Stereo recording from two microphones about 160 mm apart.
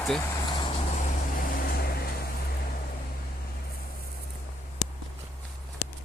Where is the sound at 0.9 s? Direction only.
55° left (ahead or behind); by 2.0 s 75° left (ahead or behind).